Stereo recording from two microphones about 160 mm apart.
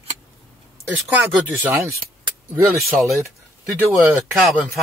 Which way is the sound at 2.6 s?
Centre (ahead or behind).